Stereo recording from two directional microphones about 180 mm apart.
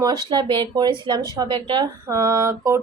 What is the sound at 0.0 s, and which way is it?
A woman's voice, 20° right (ahead or behind).